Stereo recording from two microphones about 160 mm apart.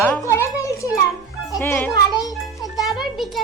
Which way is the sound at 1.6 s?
15° left (ahead or behind).